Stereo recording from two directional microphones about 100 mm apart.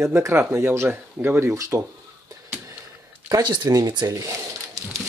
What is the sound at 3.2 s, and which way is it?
Speech, 40° right (ahead or behind).